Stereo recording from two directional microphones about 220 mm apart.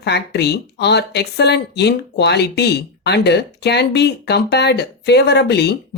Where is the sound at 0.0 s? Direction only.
50° left (ahead or behind).